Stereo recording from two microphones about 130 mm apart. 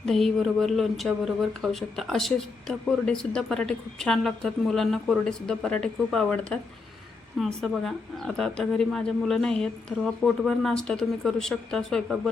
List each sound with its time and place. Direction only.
0.0 s speech: centre (ahead or behind)